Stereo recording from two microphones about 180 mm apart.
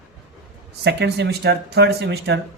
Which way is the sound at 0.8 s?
65° right (ahead or behind).